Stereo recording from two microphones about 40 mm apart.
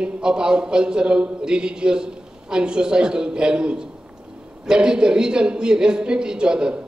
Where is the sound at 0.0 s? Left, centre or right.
Right.